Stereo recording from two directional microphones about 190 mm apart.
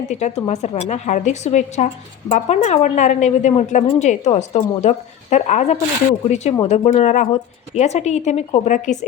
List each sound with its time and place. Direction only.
0.1 s a woman's voice: 35° left (ahead or behind)